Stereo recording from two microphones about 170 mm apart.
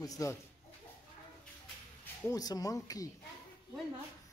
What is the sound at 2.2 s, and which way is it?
Speech, 20° left (ahead or behind).